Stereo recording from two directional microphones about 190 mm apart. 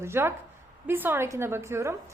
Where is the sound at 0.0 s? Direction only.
15° right (ahead or behind).